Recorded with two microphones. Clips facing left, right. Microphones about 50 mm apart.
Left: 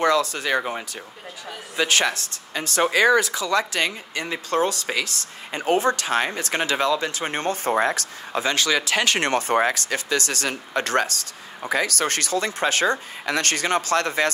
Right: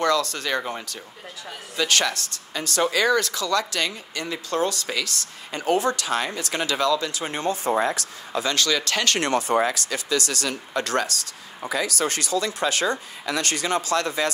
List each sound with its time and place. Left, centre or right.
0.0 s speech: centre
3.2 s speech: centre; by 8.0 s left
8.3 s speech: left
9.2 s speech: left
11.7 s speech: left